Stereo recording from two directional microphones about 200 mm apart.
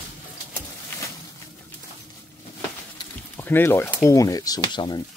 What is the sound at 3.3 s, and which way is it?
Speech, 10° left (ahead or behind).